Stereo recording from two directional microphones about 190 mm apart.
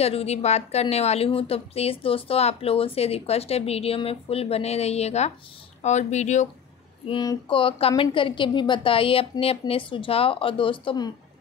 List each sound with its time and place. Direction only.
0.0 s a woman's voice: 30° left (ahead or behind)
7.1 s a woman's voice: 25° left (ahead or behind)